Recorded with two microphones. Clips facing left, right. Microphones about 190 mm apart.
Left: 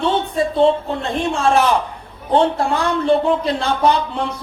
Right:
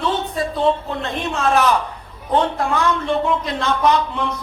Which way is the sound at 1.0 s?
30° left (ahead or behind).